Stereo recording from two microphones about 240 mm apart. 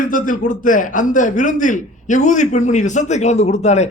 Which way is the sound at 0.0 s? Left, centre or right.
Left.